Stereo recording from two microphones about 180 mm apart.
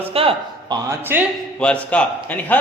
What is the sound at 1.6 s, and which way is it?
Speech, 5° left (ahead or behind).